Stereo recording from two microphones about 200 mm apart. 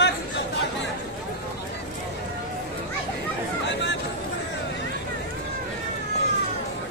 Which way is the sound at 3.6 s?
60° left (ahead or behind).